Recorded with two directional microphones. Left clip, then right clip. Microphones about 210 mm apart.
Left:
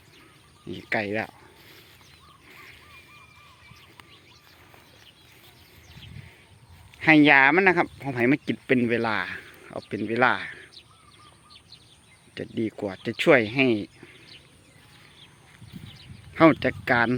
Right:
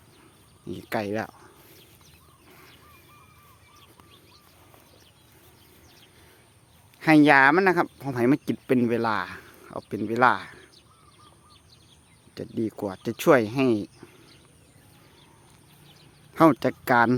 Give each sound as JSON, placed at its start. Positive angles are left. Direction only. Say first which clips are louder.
{"t": 0.7, "sound": "speech", "louder": "left 2 dB", "side_deg": -10}
{"t": 7.0, "sound": "speech", "louder": "even", "side_deg": -10}
{"t": 12.4, "sound": "speech", "louder": "even", "side_deg": -10}
{"t": 16.3, "sound": "speech", "louder": "left 1 dB", "side_deg": -20}